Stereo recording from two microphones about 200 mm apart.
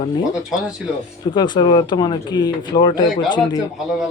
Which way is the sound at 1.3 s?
20° left (ahead or behind).